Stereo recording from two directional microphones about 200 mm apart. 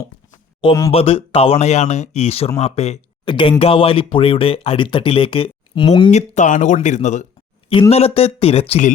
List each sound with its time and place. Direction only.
0.6 s speech: 25° left (ahead or behind)
6.1 s speech: 35° left (ahead or behind)